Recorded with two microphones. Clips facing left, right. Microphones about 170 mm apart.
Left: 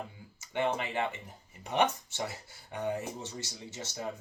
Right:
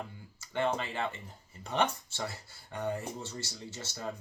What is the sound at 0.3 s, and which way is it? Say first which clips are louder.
Speech: even; 15° left (ahead or behind).